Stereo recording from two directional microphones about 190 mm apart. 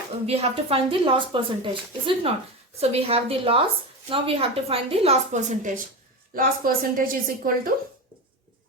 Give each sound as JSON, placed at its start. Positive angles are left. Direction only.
{"t": 0.3, "sound": "a woman's voice", "side_deg": -30}